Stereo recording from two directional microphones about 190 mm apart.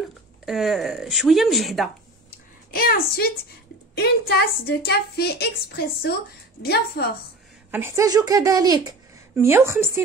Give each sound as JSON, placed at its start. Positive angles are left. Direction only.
{"t": 0.5, "sound": "speech", "side_deg": 0}
{"t": 2.7, "sound": "a woman's voice", "side_deg": 50}
{"t": 7.7, "sound": "a woman's voice", "side_deg": -15}